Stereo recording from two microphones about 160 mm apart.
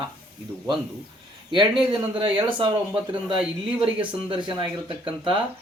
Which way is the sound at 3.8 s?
35° right (ahead or behind).